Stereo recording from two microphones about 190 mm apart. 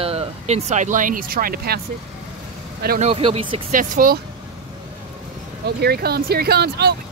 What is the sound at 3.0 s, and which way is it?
Speech, 30° right (ahead or behind).